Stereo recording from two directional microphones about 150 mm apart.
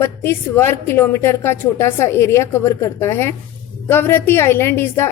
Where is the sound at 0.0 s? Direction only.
15° left (ahead or behind).